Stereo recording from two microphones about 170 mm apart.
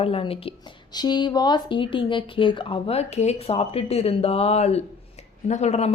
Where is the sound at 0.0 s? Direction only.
35° left (ahead or behind).